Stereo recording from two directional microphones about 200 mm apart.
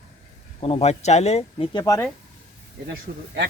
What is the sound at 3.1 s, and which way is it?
Speech, 50° right (ahead or behind).